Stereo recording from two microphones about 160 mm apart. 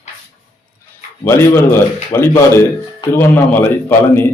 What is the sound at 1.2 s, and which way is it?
A man's voice, 15° left (ahead or behind).